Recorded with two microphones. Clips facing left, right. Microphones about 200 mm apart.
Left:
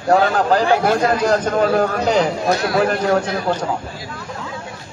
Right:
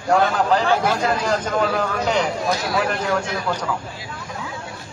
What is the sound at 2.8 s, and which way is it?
Speech, 40° left (ahead or behind).